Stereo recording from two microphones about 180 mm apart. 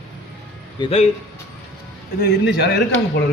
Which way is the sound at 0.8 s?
35° left (ahead or behind).